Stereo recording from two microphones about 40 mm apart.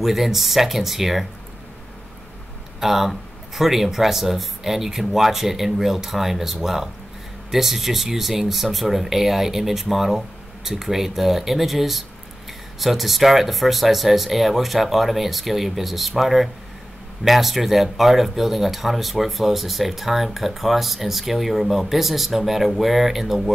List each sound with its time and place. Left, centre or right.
0.0 s speech: centre
2.8 s speech: centre